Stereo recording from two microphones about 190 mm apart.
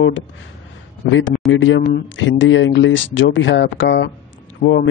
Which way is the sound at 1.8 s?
50° left (ahead or behind).